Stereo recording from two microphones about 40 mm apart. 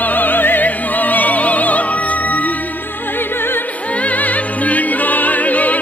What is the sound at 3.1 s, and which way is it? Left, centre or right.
Music, left.